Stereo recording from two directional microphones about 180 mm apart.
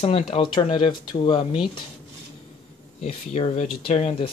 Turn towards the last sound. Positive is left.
turn(degrees=35)  # may be behind; listen again after turning